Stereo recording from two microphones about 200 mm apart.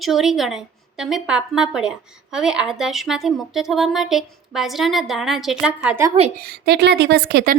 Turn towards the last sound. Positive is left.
turn(degrees=-50)  # may be behind; listen again after turning